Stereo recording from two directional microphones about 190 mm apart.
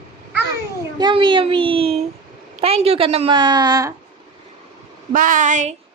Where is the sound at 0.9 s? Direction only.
25° right (ahead or behind).